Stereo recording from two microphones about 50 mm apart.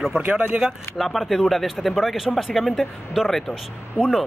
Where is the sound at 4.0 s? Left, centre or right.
Left.